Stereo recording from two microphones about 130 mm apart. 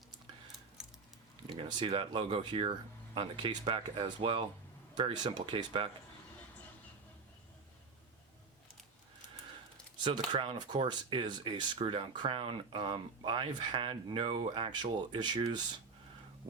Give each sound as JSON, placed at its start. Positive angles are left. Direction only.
{"t": 0.8, "sound": "a sound", "side_deg": -5}
{"t": 1.5, "sound": "speech", "side_deg": -40}
{"t": 10.0, "sound": "speech", "side_deg": -45}